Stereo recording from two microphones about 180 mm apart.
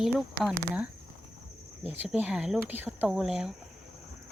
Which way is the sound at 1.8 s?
10° right (ahead or behind).